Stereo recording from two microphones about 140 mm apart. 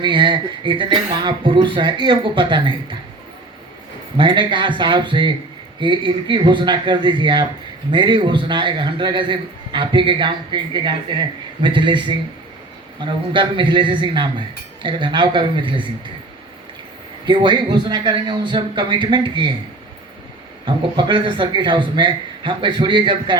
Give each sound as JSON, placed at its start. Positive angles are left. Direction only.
{"t": 0.0, "sound": "a man's voice", "side_deg": -35}
{"t": 4.2, "sound": "a man's voice", "side_deg": -35}
{"t": 17.2, "sound": "a man's voice", "side_deg": -35}
{"t": 20.7, "sound": "a man's voice", "side_deg": -35}